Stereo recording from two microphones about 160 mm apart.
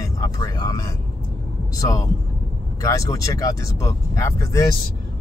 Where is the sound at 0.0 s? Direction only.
20° left (ahead or behind).